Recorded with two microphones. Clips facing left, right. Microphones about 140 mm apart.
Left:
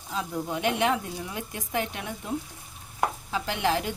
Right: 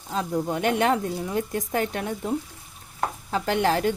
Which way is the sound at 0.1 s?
40° right (ahead or behind).